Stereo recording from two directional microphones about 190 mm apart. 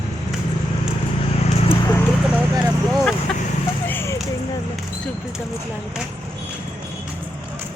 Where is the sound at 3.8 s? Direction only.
10° left (ahead or behind).